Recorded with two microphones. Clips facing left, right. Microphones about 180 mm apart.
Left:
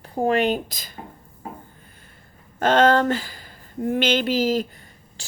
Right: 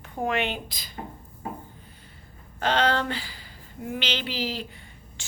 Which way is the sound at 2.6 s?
45° left (ahead or behind).